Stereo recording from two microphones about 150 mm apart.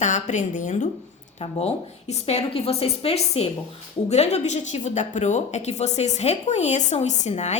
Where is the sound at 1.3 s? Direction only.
45° left (ahead or behind).